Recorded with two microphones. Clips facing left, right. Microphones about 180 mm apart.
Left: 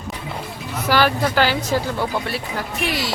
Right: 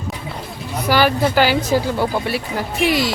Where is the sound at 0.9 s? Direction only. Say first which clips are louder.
Right 2 dB; 5° right (ahead or behind).